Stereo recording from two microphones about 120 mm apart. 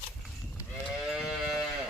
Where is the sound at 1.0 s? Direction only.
5° right (ahead or behind).